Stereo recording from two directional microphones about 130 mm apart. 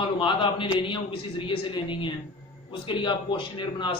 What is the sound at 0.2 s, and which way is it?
A man's voice, 40° left (ahead or behind).